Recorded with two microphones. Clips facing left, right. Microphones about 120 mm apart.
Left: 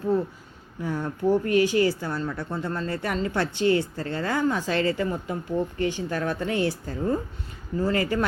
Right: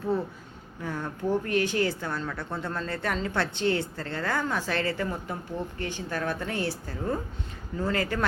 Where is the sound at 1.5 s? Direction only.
55° right (ahead or behind).